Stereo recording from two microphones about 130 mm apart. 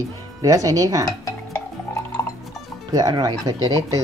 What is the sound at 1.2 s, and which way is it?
Music, 20° left (ahead or behind).